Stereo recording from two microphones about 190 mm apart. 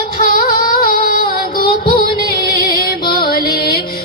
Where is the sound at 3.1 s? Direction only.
50° left (ahead or behind).